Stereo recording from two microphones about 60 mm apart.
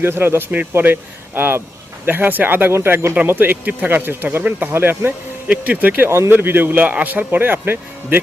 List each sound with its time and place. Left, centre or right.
0.0 s speech: right
5.5 s speech: right
6.1 s speech: right